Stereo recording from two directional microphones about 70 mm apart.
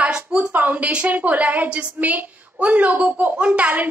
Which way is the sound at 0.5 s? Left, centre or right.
Right.